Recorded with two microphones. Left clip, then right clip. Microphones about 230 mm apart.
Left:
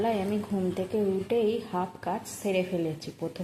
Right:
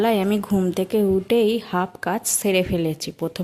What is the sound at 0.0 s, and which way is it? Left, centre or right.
A woman's voice, right.